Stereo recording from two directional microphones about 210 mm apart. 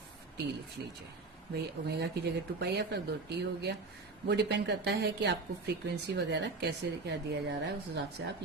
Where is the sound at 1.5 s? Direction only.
50° right (ahead or behind).